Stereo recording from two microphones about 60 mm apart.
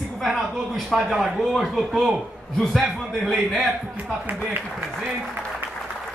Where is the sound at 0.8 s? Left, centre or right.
Centre.